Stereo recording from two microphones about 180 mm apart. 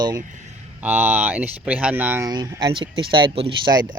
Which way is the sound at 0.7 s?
10° right (ahead or behind).